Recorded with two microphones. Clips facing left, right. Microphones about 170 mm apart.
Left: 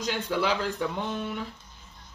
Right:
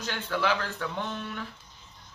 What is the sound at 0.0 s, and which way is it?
Speech, 15° left (ahead or behind).